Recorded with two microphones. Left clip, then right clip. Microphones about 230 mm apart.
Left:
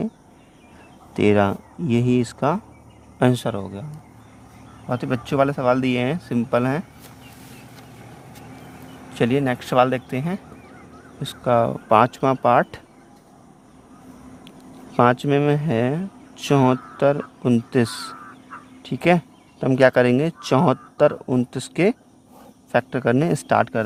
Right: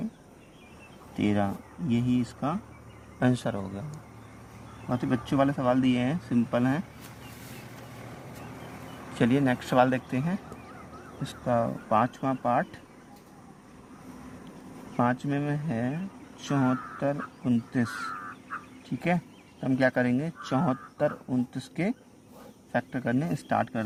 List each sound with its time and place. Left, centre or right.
1.1 s speech: left
3.2 s speech: left
4.9 s speech: left
9.1 s speech: left
14.9 s speech: left
18.9 s speech: left